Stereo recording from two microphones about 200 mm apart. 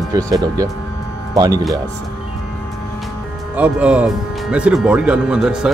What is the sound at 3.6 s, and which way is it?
Speech, 5° right (ahead or behind).